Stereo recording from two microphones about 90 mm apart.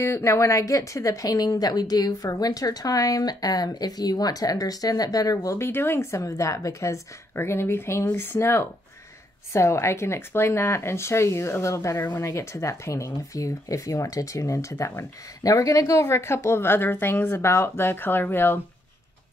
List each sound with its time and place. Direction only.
0.0 s speech: 30° left (ahead or behind)
5.6 s speech: 25° left (ahead or behind)